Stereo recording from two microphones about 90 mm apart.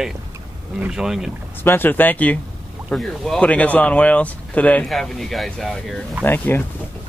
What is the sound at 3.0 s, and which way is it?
Speech, 5° left (ahead or behind).